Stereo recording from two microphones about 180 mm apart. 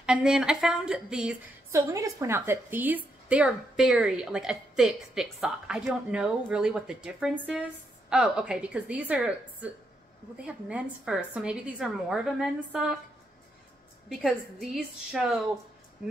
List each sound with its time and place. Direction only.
0.0 s a woman's voice: 5° right (ahead or behind)
1.7 s a woman's voice: 15° right (ahead or behind)
14.0 s a woman's voice: centre (ahead or behind)